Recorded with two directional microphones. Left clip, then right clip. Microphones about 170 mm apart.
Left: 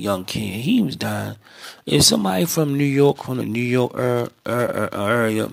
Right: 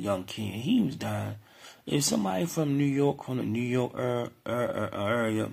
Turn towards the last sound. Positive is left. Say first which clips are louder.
# left 9 dB
turn(degrees=30)  # may be behind; listen again after turning